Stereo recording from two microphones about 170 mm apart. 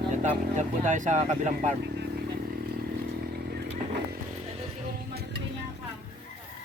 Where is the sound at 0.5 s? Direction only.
45° right (ahead or behind).